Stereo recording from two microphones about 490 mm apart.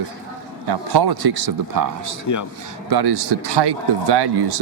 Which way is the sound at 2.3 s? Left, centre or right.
Left.